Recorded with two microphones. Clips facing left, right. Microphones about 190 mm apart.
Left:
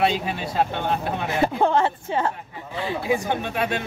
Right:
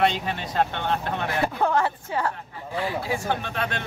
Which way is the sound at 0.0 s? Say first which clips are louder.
Left 1 dB; 5° left (ahead or behind).